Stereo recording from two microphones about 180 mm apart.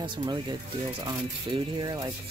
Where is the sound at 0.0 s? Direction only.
25° right (ahead or behind).